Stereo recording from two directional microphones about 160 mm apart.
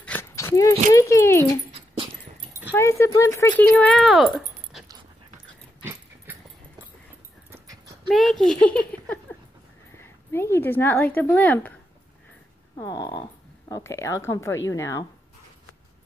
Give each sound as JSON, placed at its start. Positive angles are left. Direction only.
{"t": 0.0, "sound": "dog", "side_deg": 15}
{"t": 0.9, "sound": "speech", "side_deg": 20}
{"t": 2.7, "sound": "speech", "side_deg": 15}
{"t": 3.7, "sound": "speech", "side_deg": 5}
{"t": 8.1, "sound": "a child's voice", "side_deg": 0}
{"t": 12.7, "sound": "speech", "side_deg": 25}